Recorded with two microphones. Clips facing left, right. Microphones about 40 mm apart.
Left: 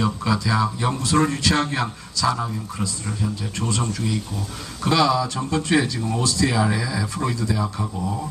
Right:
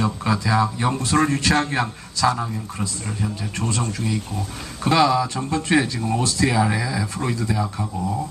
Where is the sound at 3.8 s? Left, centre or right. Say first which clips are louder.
Even; right.